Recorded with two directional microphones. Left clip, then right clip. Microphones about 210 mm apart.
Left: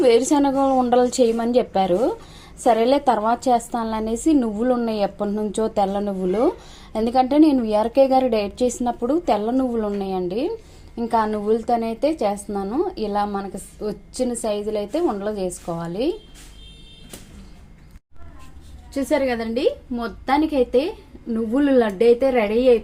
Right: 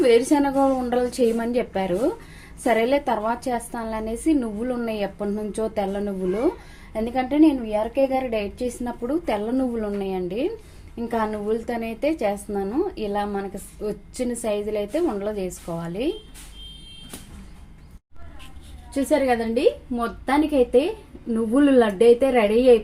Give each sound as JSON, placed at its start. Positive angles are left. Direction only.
{"t": 0.0, "sound": "a woman's voice", "side_deg": 15}
{"t": 18.9, "sound": "a woman's voice", "side_deg": 0}